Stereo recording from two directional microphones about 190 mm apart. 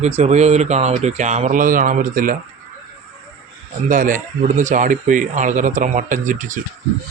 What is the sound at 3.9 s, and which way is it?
Speech, 45° right (ahead or behind).